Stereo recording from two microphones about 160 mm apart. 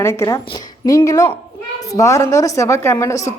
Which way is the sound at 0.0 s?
15° left (ahead or behind).